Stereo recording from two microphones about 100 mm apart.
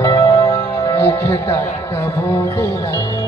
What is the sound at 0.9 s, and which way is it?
Speech, 25° left (ahead or behind).